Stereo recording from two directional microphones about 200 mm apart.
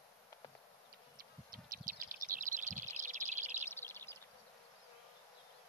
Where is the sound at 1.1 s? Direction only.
45° right (ahead or behind).